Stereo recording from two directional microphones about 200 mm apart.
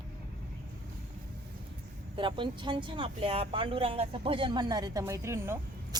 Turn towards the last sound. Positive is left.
turn(degrees=-15)  # may be behind; listen again after turning